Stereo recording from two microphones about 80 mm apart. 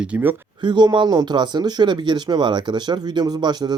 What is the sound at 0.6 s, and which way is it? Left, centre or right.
Speech, right.